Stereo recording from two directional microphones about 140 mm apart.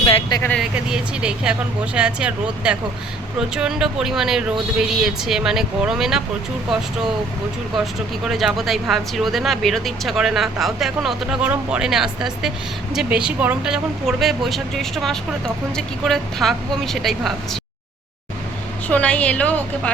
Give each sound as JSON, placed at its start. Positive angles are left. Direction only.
{"t": 0.0, "sound": "a sound", "side_deg": 35}
{"t": 0.6, "sound": "speech", "side_deg": -5}
{"t": 8.2, "sound": "speech", "side_deg": -5}
{"t": 18.9, "sound": "a woman's voice", "side_deg": 10}